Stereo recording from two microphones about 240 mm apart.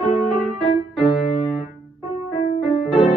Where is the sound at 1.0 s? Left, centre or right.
Left.